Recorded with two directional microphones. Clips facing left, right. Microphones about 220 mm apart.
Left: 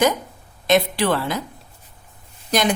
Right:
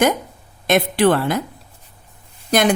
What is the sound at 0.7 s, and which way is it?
Speech, 55° right (ahead or behind).